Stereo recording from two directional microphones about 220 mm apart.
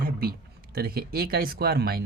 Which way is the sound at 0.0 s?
45° right (ahead or behind).